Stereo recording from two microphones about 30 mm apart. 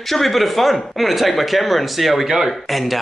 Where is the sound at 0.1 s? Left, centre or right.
Centre.